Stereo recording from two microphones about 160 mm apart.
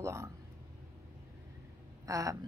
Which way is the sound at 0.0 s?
15° right (ahead or behind).